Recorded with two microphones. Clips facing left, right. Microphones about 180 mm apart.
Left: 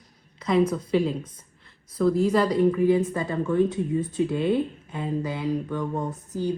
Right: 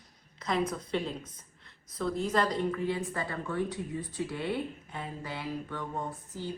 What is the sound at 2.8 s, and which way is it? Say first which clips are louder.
Speech: left 11 dB; 20° left (ahead or behind).